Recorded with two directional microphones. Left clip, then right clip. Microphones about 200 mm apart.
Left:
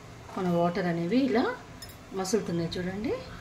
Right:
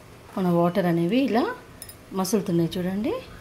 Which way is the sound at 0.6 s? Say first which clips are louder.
Right 6 dB; 40° right (ahead or behind).